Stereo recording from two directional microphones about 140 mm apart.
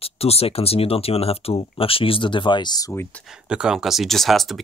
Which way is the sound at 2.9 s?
15° left (ahead or behind).